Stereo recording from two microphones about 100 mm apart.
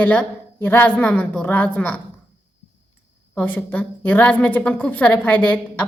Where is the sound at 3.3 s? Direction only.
20° left (ahead or behind).